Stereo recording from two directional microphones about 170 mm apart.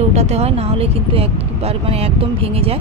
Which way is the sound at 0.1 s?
40° right (ahead or behind).